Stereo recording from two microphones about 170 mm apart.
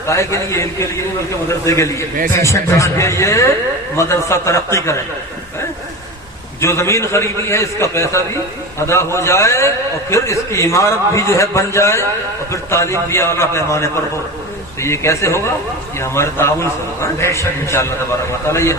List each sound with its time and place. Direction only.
0.1 s a man's voice: 15° left (ahead or behind)
6.6 s a man's voice: 15° left (ahead or behind)